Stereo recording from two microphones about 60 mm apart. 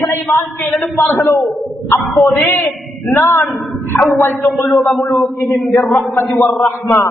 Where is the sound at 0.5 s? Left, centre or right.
Left.